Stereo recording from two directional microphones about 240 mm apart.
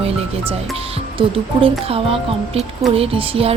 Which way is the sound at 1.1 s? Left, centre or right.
Right.